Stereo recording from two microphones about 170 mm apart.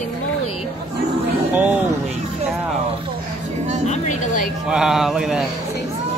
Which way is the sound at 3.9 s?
50° left (ahead or behind).